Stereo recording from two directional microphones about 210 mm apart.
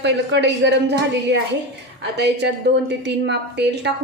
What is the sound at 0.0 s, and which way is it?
A woman's voice, 55° right (ahead or behind).